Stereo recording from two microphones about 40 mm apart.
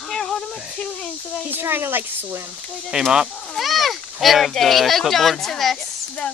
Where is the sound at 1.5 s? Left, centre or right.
Right.